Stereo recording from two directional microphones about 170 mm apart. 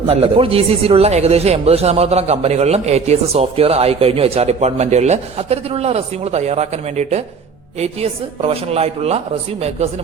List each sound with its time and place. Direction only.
0.1 s a man's voice: 35° right (ahead or behind)